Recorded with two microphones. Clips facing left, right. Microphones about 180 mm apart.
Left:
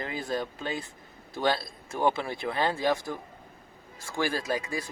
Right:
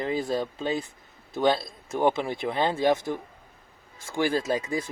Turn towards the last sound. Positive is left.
turn(degrees=-20)  # may be behind; listen again after turning